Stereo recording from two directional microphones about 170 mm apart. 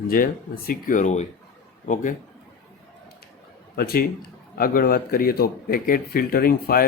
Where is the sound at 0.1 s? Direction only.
55° left (ahead or behind).